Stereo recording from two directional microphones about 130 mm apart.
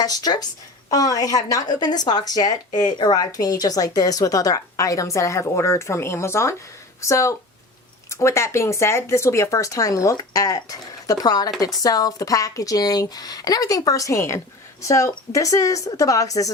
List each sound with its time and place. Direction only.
0.0 s speech: 30° left (ahead or behind)